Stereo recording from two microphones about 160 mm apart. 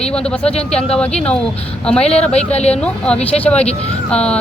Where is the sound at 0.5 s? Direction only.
40° left (ahead or behind).